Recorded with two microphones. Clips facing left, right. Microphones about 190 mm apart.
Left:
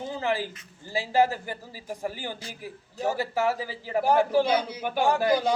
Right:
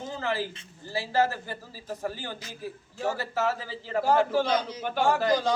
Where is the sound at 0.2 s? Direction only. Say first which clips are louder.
Left 2 dB; 15° left (ahead or behind).